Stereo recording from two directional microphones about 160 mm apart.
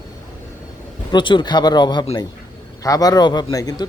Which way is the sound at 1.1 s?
30° left (ahead or behind).